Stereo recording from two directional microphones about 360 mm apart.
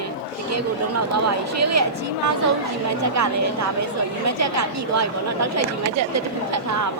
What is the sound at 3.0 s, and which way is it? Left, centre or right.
A woman's voice, right.